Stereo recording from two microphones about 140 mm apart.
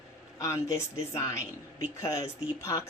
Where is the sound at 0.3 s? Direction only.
25° left (ahead or behind).